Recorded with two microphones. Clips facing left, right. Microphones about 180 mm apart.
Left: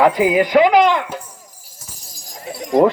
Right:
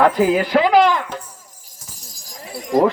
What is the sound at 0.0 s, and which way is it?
Speech, 10° left (ahead or behind).